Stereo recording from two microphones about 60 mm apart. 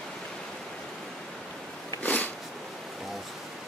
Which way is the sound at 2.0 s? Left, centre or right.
Left.